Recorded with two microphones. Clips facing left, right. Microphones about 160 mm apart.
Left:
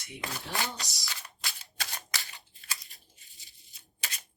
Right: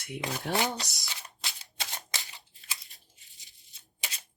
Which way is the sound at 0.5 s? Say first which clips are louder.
Right 6 dB; 20° right (ahead or behind).